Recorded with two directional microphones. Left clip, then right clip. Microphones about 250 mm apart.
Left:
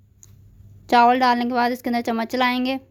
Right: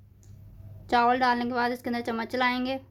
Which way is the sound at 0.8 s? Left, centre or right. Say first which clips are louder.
Left 7 dB; left.